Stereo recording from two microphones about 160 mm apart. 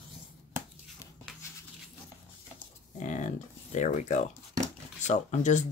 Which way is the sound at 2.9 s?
50° left (ahead or behind).